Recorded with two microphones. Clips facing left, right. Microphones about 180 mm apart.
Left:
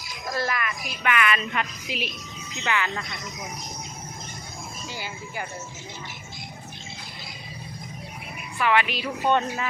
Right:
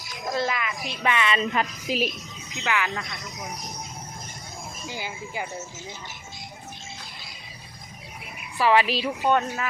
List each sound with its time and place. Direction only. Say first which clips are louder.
0.3 s a woman's voice: right 1 dB; 15° right (ahead or behind); by 2.1 s 40° right (ahead or behind)
2.6 s speech: even; 5° right (ahead or behind)
4.9 s speech: right 3 dB; 15° right (ahead or behind)
8.5 s a woman's voice: right 3 dB; 35° right (ahead or behind)
9.2 s speech: left 1 dB; 5° right (ahead or behind)